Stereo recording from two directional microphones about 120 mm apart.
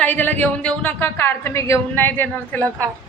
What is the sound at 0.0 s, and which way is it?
A woman's voice, 15° left (ahead or behind).